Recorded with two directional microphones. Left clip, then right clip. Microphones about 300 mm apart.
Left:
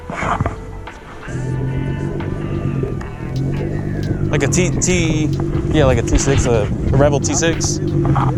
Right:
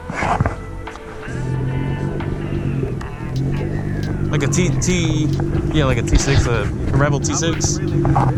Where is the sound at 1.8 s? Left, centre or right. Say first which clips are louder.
Left 1 dB; centre.